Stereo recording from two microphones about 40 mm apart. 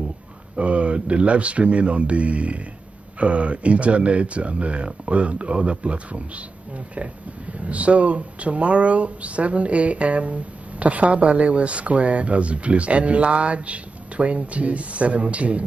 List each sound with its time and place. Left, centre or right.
0.6 s speech: right
7.6 s speech: right